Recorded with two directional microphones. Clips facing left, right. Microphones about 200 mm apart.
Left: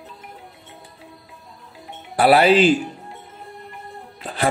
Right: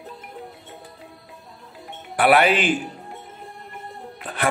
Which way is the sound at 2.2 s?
30° left (ahead or behind).